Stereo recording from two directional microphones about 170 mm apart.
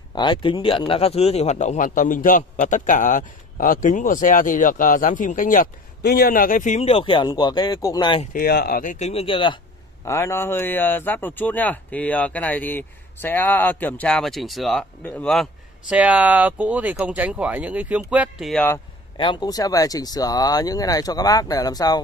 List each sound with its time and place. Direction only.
0.1 s speech: 25° left (ahead or behind); by 6.8 s 50° left (ahead or behind)
6.8 s speech: 35° left (ahead or behind)
8.3 s speech: 60° left (ahead or behind)
8.9 s speech: 40° left (ahead or behind)
10.0 s speech: 15° left (ahead or behind)
15.9 s speech: 10° right (ahead or behind)
18.5 s speech: 10° left (ahead or behind)
19.1 s speech: 30° left (ahead or behind)